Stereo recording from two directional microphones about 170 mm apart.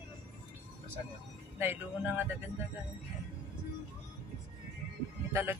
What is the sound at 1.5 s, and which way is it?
Speech, 10° right (ahead or behind).